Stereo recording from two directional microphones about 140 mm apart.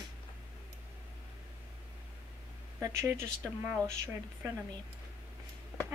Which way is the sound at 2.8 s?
20° right (ahead or behind).